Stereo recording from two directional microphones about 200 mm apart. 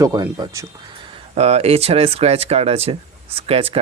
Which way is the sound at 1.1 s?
30° right (ahead or behind).